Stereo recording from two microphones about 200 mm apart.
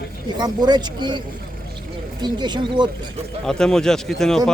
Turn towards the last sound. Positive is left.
turn(degrees=0)  # may be behind; listen again after turning